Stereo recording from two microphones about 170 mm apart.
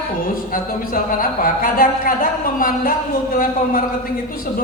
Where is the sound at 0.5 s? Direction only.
55° left (ahead or behind).